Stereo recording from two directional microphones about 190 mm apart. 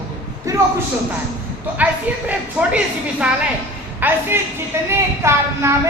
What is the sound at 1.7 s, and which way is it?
A woman's voice, 10° right (ahead or behind).